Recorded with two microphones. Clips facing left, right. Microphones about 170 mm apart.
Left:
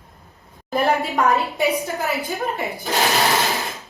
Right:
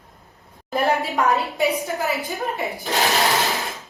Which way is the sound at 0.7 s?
Centre (ahead or behind).